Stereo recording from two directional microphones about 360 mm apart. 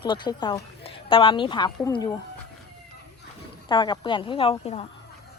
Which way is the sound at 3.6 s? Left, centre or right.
Centre.